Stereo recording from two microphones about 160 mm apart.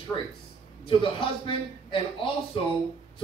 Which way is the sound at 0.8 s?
35° left (ahead or behind).